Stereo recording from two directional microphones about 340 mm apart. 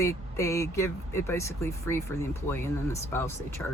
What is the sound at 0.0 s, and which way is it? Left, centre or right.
Speech, centre.